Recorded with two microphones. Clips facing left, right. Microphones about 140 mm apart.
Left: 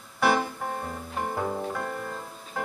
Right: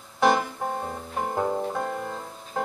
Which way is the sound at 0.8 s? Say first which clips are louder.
Right 2 dB; 15° right (ahead or behind).